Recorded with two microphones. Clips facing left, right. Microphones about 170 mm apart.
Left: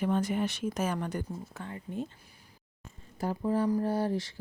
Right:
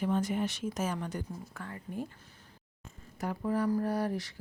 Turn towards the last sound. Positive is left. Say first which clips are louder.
# left 2 dB
turn(degrees=25)  # may be behind; listen again after turning